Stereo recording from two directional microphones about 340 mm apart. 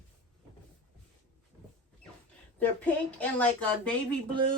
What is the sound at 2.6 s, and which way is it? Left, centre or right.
Speech, centre.